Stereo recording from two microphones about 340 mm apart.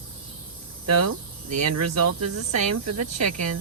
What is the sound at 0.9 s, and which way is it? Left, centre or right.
Speech, right.